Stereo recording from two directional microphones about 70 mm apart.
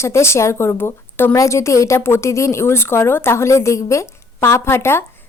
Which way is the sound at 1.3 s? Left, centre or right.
Left.